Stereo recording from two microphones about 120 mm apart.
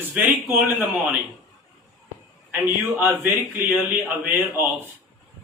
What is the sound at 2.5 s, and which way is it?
A man's voice, 15° right (ahead or behind).